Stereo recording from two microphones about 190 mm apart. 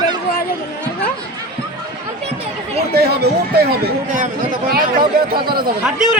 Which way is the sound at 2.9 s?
55° right (ahead or behind).